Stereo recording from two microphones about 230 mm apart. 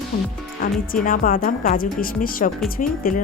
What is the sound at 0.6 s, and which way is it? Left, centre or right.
A woman's voice, left.